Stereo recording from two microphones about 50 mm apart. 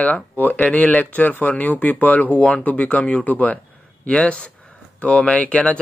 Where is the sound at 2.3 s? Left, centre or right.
Left.